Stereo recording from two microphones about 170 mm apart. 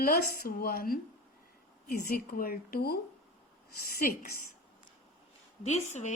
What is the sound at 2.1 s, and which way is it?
A woman's voice, 60° left (ahead or behind).